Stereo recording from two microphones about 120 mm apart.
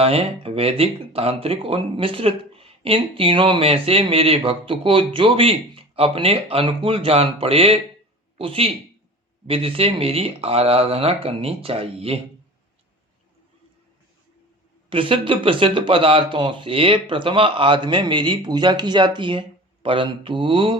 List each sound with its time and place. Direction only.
0.0 s speech: 55° right (ahead or behind)
14.8 s speech: 45° right (ahead or behind)